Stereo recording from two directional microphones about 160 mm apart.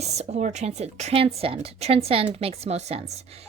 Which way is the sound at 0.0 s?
45° right (ahead or behind).